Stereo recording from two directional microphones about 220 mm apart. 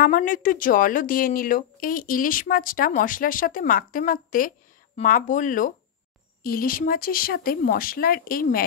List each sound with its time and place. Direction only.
0.0 s a woman's voice: 40° left (ahead or behind)